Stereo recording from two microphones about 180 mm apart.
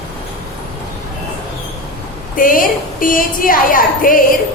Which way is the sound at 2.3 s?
50° left (ahead or behind).